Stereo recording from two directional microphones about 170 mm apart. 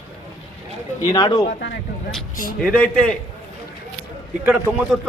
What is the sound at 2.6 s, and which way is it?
Speech, 5° left (ahead or behind).